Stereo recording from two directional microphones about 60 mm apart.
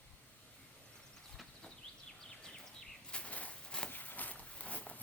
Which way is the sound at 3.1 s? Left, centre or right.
Left.